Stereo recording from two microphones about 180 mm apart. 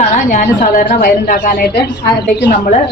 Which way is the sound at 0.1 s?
45° left (ahead or behind).